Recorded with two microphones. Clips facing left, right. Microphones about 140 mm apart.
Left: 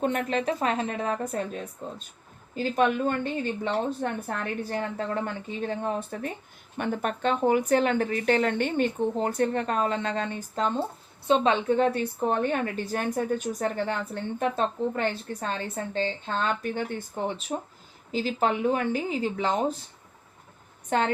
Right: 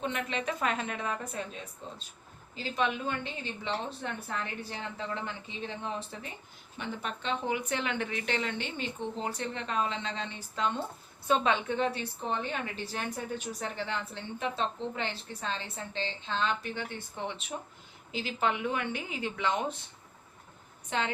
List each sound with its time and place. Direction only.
0.0 s a woman's voice: 45° left (ahead or behind)
20.9 s a woman's voice: 50° left (ahead or behind)